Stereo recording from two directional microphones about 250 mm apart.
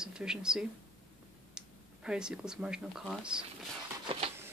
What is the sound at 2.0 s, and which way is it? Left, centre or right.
Speech, centre.